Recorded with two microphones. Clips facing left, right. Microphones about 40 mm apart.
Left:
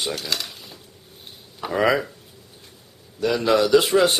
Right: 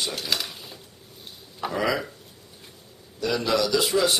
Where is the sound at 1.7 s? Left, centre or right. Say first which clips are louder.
Left 6 dB; left.